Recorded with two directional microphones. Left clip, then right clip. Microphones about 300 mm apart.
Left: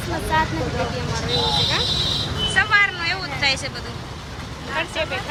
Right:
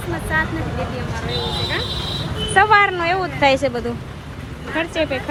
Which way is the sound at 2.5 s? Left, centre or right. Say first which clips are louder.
Right 5 dB; centre.